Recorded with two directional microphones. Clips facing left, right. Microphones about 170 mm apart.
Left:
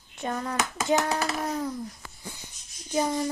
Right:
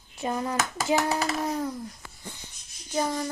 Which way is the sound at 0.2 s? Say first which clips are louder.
Right 1 dB; 10° right (ahead or behind).